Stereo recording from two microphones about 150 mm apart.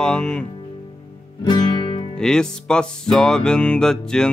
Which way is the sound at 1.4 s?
30° left (ahead or behind).